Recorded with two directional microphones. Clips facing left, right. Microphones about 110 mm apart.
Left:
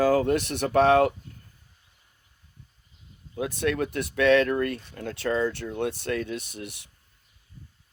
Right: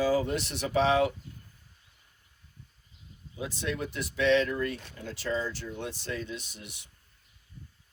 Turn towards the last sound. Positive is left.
turn(degrees=60)  # may be behind; listen again after turning